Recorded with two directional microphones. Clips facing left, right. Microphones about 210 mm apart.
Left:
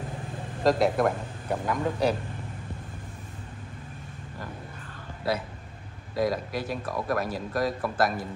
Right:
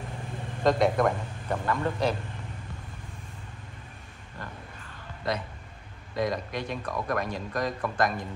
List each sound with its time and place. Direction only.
0.7 s speech: 5° left (ahead or behind)
5.2 s speech: 5° left (ahead or behind)